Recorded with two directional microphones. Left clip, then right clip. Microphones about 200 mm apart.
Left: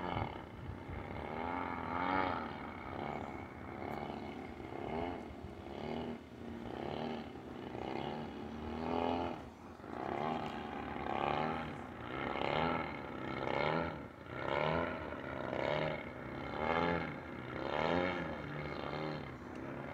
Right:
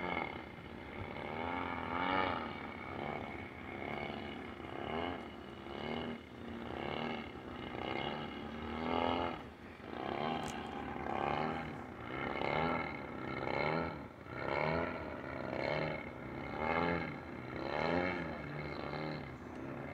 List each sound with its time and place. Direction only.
0.0 s roaring cats: centre (ahead or behind)
1.3 s vehicle: centre (ahead or behind)
5.8 s vehicle: 10° left (ahead or behind)
6.8 s roaring cats: 5° left (ahead or behind)
7.8 s roar: 5° left (ahead or behind)
8.7 s roaring cats: 5° left (ahead or behind)
11.1 s roar: centre (ahead or behind)
17.6 s a sound: centre (ahead or behind)